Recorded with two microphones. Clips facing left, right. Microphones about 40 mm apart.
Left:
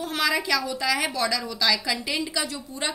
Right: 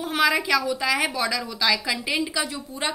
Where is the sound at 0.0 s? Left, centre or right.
Centre.